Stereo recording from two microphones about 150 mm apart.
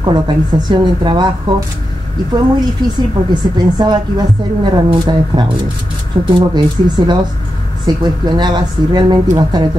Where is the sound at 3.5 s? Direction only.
30° right (ahead or behind).